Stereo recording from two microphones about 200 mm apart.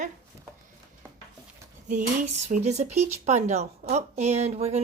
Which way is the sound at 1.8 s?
40° right (ahead or behind).